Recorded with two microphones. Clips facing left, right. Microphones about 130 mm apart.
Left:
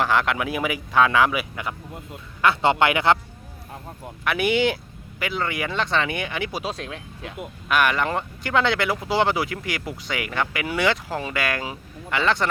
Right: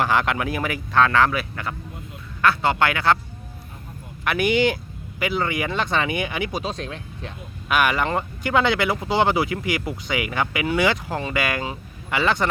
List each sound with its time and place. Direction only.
0.0 s speech: centre (ahead or behind)
2.4 s speech: 25° left (ahead or behind)
4.2 s speech: centre (ahead or behind)